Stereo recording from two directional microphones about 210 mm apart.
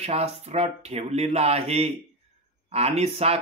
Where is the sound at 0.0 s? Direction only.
30° right (ahead or behind).